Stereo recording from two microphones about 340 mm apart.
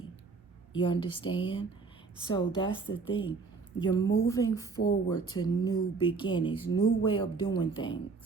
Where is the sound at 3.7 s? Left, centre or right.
Left.